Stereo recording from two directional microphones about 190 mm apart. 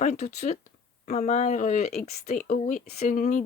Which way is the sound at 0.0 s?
40° left (ahead or behind).